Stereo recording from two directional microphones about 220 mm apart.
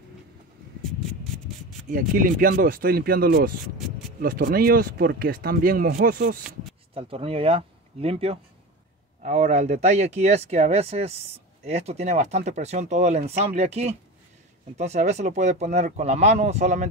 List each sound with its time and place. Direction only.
1.9 s speech: 40° right (ahead or behind)
6.9 s speech: 25° right (ahead or behind)